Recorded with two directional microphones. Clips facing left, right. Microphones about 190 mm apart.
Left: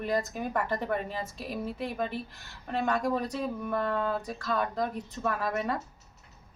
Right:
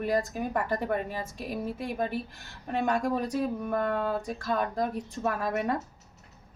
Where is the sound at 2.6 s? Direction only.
10° right (ahead or behind).